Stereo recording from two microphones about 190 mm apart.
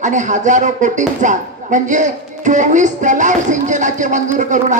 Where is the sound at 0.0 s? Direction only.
40° right (ahead or behind).